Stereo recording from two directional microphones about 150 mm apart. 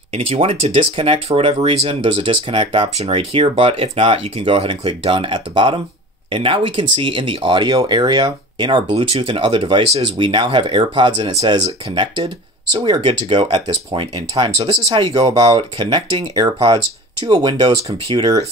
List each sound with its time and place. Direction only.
0.1 s speech: 40° right (ahead or behind)